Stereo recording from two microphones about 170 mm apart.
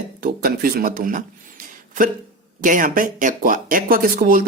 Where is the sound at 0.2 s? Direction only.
60° right (ahead or behind).